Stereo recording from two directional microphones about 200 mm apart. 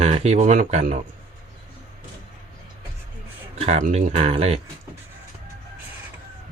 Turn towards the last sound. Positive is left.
turn(degrees=-30)  # may be behind; listen again after turning